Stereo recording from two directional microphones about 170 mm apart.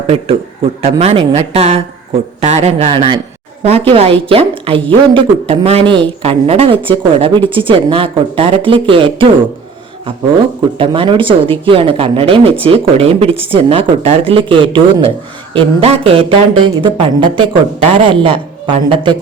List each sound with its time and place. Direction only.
0.8 s a woman's voice: 35° right (ahead or behind)
10.8 s a woman's voice: 30° right (ahead or behind)